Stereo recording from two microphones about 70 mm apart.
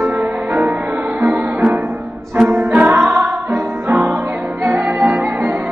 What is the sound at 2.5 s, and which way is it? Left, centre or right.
Music, right.